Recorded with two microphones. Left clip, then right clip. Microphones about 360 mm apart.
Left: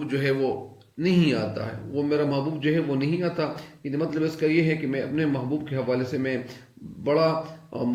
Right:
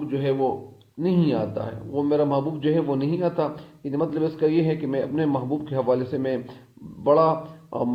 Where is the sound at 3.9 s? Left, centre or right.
Centre.